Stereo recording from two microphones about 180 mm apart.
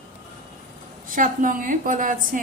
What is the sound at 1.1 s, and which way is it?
A woman's voice, 45° right (ahead or behind).